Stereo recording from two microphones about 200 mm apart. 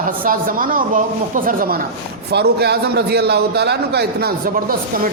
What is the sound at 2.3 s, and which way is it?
A man's voice, 55° right (ahead or behind).